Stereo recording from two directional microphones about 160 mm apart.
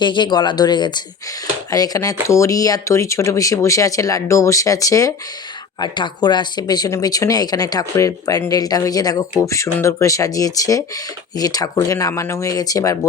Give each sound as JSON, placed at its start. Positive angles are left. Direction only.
{"t": 0.0, "sound": "speech", "side_deg": 30}